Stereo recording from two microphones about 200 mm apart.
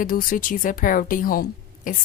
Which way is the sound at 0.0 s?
45° left (ahead or behind).